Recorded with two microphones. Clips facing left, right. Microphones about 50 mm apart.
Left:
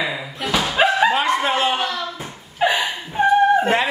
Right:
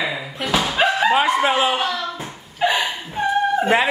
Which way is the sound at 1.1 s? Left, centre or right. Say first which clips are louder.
Right 2 dB; centre.